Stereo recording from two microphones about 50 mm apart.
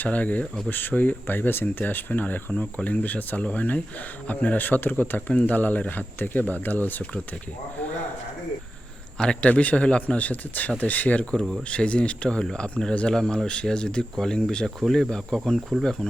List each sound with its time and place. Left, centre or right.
0.0 s speech: left
9.1 s speech: centre
10.2 s speech: left; by 15.4 s centre